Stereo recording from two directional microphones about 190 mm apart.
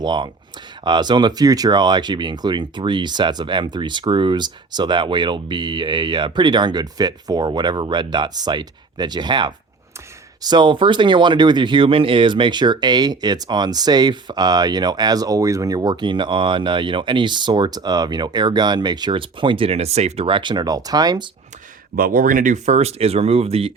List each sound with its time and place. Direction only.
0.0 s speech: 25° right (ahead or behind)
21.9 s speech: 50° right (ahead or behind); by 23.7 s 30° right (ahead or behind)